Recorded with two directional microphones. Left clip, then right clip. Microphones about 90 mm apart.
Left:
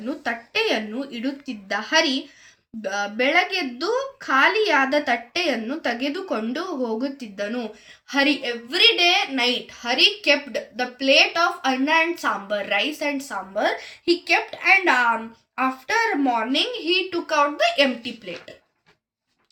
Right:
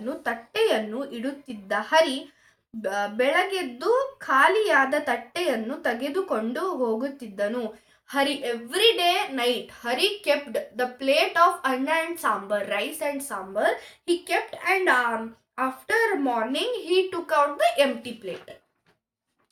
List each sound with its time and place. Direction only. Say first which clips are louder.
0.0 s speech: left 2 dB; 45° right (ahead or behind)
8.1 s a woman's voice: left 4 dB; 55° right (ahead or behind)